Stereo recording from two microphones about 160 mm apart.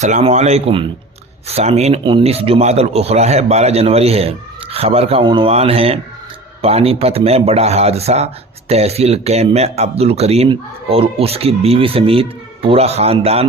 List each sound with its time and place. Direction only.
0.0 s a man's voice: 45° right (ahead or behind)